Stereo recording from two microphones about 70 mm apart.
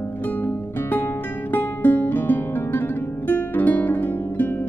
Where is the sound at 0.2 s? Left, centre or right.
Left.